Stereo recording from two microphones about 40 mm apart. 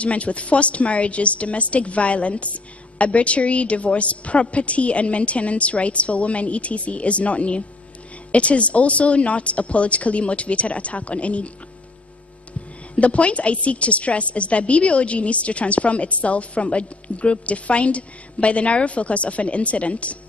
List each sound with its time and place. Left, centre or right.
0.0 s a woman's voice: left
12.9 s a woman's voice: left